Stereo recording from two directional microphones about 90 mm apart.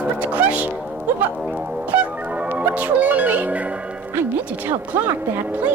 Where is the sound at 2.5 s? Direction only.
15° right (ahead or behind).